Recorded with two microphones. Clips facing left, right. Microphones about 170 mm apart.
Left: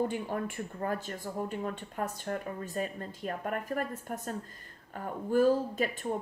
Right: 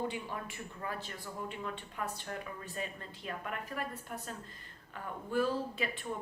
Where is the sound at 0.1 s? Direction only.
50° left (ahead or behind).